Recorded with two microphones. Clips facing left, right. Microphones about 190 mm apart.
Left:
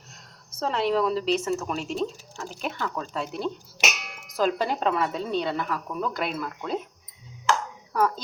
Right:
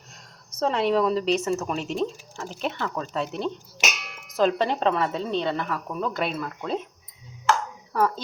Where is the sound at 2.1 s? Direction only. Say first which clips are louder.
Right 1 dB; 15° right (ahead or behind).